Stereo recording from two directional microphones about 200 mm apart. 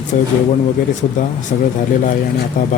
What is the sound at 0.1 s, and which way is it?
Speech, 40° left (ahead or behind).